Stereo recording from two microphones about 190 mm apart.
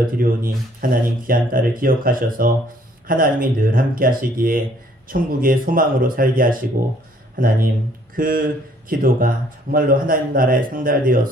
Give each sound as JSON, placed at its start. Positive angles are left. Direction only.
{"t": 0.0, "sound": "speech", "side_deg": -50}